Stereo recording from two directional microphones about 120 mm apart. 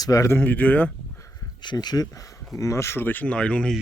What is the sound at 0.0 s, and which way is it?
Speech, 25° left (ahead or behind).